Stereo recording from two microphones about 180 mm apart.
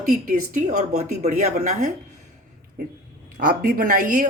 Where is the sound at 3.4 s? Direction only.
50° right (ahead or behind).